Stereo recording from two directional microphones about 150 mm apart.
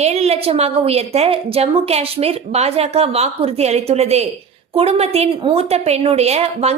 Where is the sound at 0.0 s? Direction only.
45° right (ahead or behind).